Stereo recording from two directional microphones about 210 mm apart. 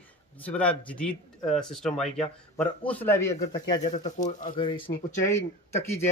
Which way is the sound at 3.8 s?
35° left (ahead or behind).